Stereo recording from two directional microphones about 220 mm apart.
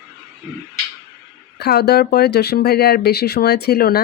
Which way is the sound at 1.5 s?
50° left (ahead or behind).